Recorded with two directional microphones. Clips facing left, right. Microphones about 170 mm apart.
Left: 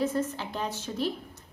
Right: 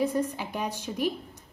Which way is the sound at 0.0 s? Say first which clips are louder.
Right 1 dB; 15° right (ahead or behind).